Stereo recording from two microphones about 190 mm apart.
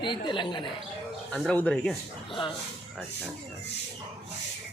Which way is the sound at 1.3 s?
5° left (ahead or behind).